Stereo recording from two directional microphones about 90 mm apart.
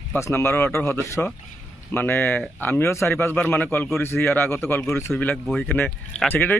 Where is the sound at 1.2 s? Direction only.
15° left (ahead or behind).